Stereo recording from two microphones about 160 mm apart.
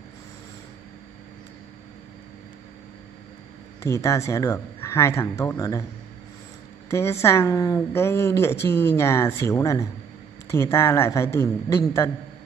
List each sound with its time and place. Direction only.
3.8 s speech: 20° left (ahead or behind)
6.9 s a woman's voice: 15° left (ahead or behind)